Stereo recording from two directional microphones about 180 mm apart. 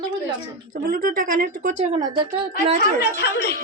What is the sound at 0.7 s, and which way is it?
A woman's voice, 55° right (ahead or behind).